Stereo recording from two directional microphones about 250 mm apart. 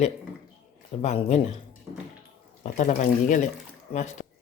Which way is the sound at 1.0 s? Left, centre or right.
Left.